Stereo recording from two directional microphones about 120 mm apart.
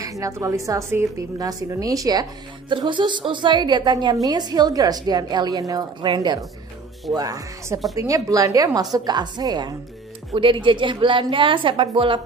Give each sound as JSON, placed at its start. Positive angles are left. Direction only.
{"t": 0.0, "sound": "a woman's voice", "side_deg": -30}
{"t": 2.7, "sound": "a woman's voice", "side_deg": -40}
{"t": 10.3, "sound": "a woman's voice", "side_deg": -45}